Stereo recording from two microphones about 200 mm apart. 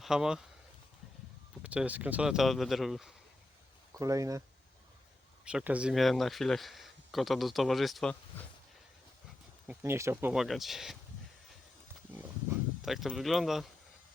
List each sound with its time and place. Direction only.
0.0 s speech: 5° right (ahead or behind)
1.6 s speech: 5° right (ahead or behind)
3.9 s speech: 15° right (ahead or behind)
5.5 s speech: 5° right (ahead or behind)
9.6 s speech: 10° right (ahead or behind)
12.8 s speech: centre (ahead or behind)